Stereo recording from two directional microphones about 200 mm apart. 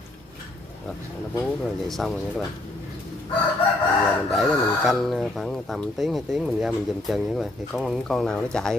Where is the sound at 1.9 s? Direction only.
Centre (ahead or behind).